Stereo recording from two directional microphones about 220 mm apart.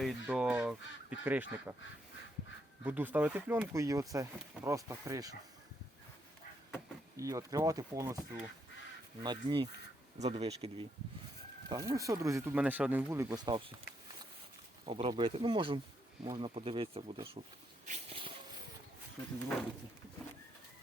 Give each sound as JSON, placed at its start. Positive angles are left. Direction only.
{"t": 0.0, "sound": "speech", "side_deg": 0}
{"t": 2.8, "sound": "speech", "side_deg": -10}
{"t": 7.2, "sound": "speech", "side_deg": -15}
{"t": 9.2, "sound": "speech", "side_deg": -20}
{"t": 11.7, "sound": "speech", "side_deg": -15}
{"t": 14.8, "sound": "speech", "side_deg": -25}
{"t": 17.8, "sound": "a sound", "side_deg": -30}